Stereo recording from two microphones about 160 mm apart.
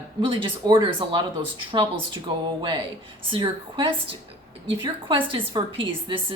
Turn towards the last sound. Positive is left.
turn(degrees=-35)  # may be behind; listen again after turning